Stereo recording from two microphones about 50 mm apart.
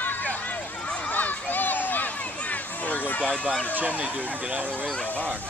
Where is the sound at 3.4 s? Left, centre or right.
Left.